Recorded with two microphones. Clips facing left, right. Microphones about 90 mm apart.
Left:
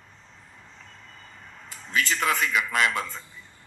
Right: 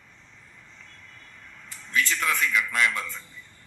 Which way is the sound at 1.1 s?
30° left (ahead or behind).